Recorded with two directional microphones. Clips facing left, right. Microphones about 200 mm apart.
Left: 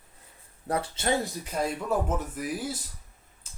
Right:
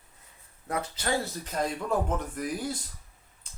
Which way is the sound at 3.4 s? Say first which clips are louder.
Left 1 dB; 5° left (ahead or behind).